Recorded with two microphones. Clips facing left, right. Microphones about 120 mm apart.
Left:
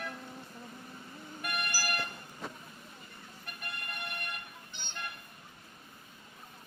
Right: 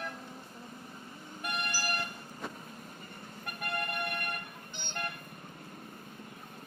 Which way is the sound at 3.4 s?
50° right (ahead or behind).